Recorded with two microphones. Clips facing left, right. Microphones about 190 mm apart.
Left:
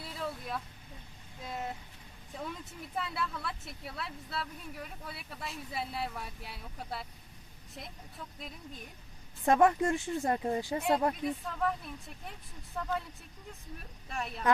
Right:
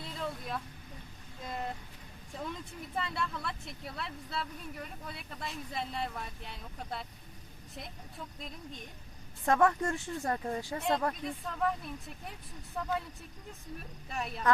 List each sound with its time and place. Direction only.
0.0 s vehicle: 5° left (ahead or behind)
1.5 s speech: 5° left (ahead or behind)
2.9 s speech: 5° left (ahead or behind)
8.4 s speech: 5° left (ahead or behind)
9.5 s speech: 20° left (ahead or behind); by 14.4 s centre (ahead or behind)